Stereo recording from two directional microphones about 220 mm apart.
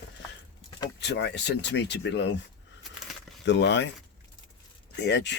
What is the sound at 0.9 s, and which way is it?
Speech, 50° left (ahead or behind).